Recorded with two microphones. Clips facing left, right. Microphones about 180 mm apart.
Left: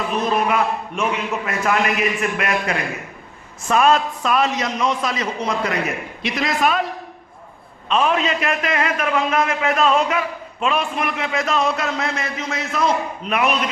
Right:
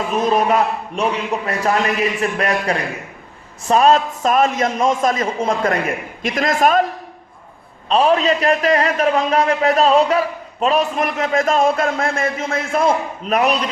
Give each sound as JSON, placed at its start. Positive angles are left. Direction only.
{"t": 0.1, "sound": "a man's voice", "side_deg": -45}
{"t": 7.9, "sound": "a man's voice", "side_deg": -35}